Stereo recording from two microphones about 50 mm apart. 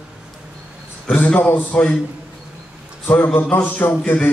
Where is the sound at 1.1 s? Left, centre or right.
Left.